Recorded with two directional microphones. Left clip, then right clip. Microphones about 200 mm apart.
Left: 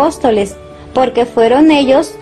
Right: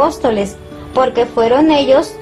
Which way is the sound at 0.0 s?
50° left (ahead or behind).